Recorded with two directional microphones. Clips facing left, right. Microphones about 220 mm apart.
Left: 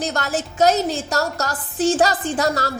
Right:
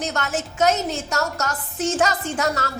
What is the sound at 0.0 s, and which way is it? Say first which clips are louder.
A woman's voice: left 2 dB; 35° left (ahead or behind).